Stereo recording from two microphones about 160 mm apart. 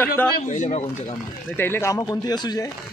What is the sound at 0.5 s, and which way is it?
Speech, 50° left (ahead or behind).